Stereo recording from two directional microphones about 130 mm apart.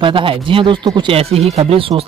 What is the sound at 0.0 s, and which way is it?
Speech, 40° right (ahead or behind).